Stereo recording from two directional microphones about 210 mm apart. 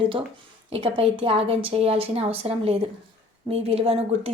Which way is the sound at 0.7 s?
25° right (ahead or behind).